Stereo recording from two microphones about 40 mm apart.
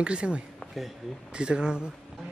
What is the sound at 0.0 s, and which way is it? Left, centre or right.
Speech, right.